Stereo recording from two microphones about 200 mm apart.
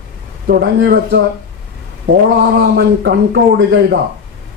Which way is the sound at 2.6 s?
55° right (ahead or behind).